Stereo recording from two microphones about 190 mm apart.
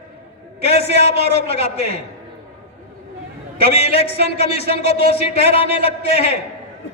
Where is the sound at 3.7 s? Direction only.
30° left (ahead or behind).